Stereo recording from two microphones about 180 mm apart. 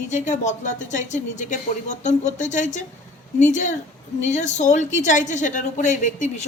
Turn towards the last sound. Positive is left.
turn(degrees=45)  # may be behind; listen again after turning